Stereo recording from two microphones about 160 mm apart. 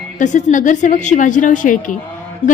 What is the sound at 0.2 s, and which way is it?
A woman's voice, 50° left (ahead or behind).